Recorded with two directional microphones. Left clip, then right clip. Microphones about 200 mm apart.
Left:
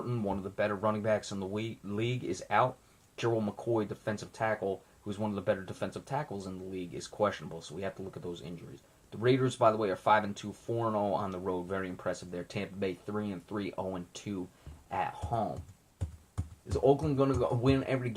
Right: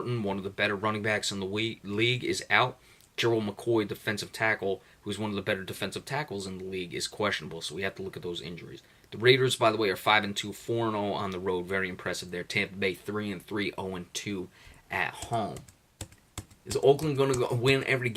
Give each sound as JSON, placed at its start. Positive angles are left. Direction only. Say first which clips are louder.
{"t": 0.1, "sound": "speech", "louder": "right 3 dB", "side_deg": -15}
{"t": 16.8, "sound": "speech", "louder": "right 3 dB", "side_deg": -15}